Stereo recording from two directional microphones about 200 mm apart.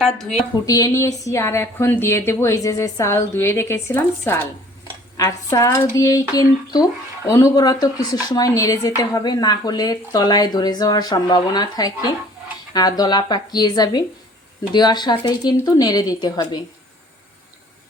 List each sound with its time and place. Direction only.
0.0 s a woman's voice: centre (ahead or behind)
0.6 s speech: 20° left (ahead or behind)